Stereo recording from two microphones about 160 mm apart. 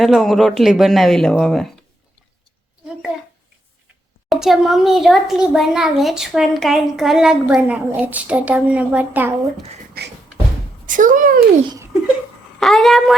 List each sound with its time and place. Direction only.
0.0 s a child's voice: centre (ahead or behind)
4.3 s a child's voice: centre (ahead or behind)
10.0 s music: 75° right (ahead or behind)
10.8 s speech: 55° right (ahead or behind)
12.5 s a woman's voice: centre (ahead or behind)